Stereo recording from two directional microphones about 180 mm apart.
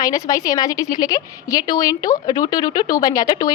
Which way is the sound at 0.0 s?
20° left (ahead or behind).